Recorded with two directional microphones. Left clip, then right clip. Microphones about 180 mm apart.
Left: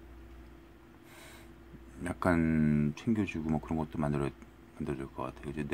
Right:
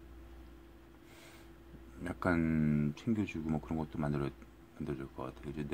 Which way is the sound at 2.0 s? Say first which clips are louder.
Left 4 dB; 5° left (ahead or behind).